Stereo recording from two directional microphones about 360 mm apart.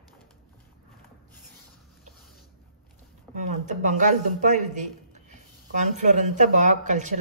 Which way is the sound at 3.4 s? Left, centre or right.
Right.